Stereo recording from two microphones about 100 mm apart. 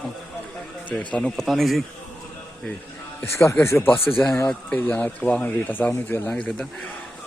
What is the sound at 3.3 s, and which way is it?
Speech, 25° left (ahead or behind).